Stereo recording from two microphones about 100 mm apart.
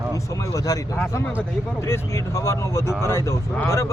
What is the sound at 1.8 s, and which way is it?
Speech, 30° left (ahead or behind).